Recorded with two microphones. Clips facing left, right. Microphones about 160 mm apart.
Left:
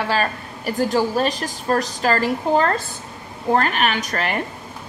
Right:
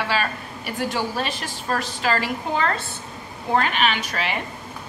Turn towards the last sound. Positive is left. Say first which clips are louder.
# left 3 dB
turn(degrees=50)  # may be behind; listen again after turning